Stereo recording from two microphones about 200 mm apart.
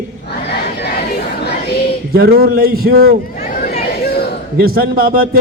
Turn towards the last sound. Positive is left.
turn(degrees=-50)  # may be behind; listen again after turning